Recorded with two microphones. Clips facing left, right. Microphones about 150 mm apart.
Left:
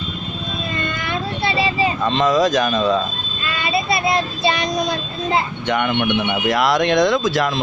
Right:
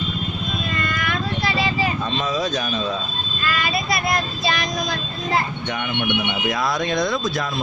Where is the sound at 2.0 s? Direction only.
90° left.